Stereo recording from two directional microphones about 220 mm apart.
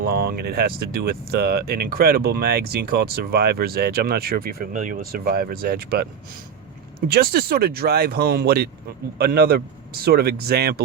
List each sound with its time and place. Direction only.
0.2 s speech: 45° right (ahead or behind)
7.1 s speech: 45° right (ahead or behind)